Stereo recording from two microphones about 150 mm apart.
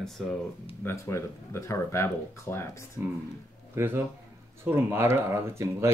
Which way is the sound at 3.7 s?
15° right (ahead or behind).